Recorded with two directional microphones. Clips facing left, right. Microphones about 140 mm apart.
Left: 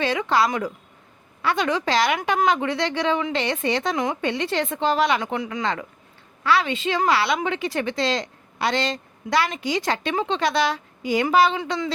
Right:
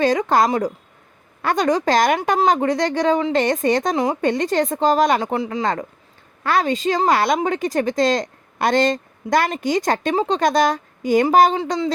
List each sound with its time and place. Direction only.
0.0 s a woman's voice: 40° right (ahead or behind)
6.4 s a woman's voice: 45° right (ahead or behind)
11.6 s speech: 30° right (ahead or behind)